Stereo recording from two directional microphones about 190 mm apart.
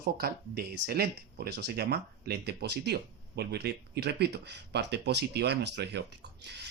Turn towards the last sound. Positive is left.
turn(degrees=-60)  # may be behind; listen again after turning